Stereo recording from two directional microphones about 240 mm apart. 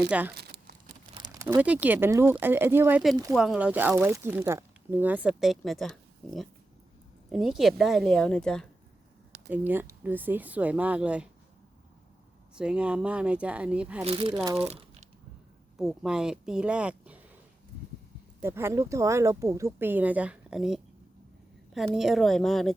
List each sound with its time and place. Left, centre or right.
0.1 s speech: centre
0.3 s crumpling: right
1.2 s speech: centre
9.5 s speech: centre
12.5 s speech: centre
14.0 s speech: right
14.3 s speech: centre
15.8 s speech: centre
18.4 s speech: centre